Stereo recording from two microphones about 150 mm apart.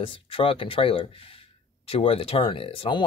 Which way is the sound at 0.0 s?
35° left (ahead or behind).